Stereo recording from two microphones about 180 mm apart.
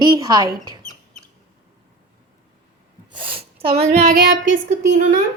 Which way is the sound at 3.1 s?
30° right (ahead or behind).